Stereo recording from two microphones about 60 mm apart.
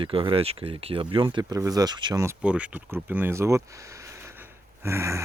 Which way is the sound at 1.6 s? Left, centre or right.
Right.